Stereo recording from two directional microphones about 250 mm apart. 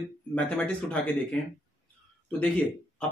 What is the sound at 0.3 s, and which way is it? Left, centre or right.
Speech, centre.